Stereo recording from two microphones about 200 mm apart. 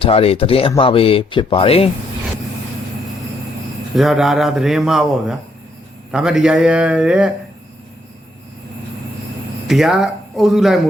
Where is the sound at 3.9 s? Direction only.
Centre (ahead or behind).